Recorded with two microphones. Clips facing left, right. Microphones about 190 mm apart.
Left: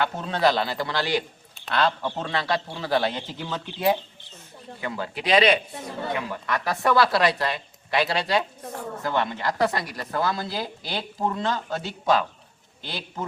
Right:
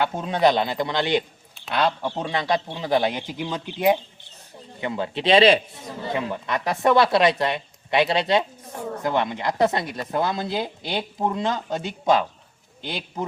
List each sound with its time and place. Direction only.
0.0 s a man's voice: 15° right (ahead or behind)